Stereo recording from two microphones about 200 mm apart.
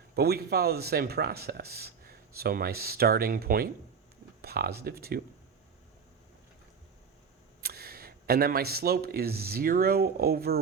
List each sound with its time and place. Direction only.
0.2 s speech: 50° right (ahead or behind)
4.4 s a sound: 50° right (ahead or behind)
4.8 s speech: 50° right (ahead or behind)
7.6 s speech: 50° right (ahead or behind)